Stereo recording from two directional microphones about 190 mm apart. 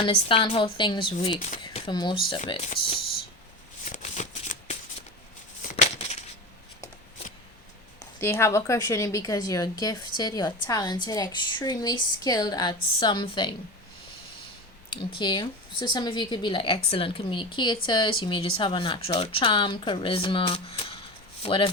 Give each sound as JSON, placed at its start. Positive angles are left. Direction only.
{"t": 0.0, "sound": "a woman's voice", "side_deg": 30}
{"t": 3.8, "sound": "shuffling cards", "side_deg": 35}
{"t": 5.7, "sound": "a sound", "side_deg": 35}
{"t": 8.2, "sound": "a woman's voice", "side_deg": 15}
{"t": 15.2, "sound": "a woman's voice", "side_deg": 25}